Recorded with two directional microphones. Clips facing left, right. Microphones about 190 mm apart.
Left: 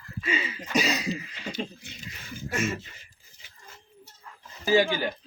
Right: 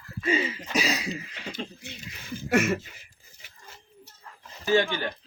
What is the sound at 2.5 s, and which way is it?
Speech, 70° right (ahead or behind).